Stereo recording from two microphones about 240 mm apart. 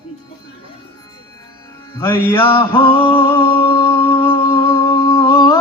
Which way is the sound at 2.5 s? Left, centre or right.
Left.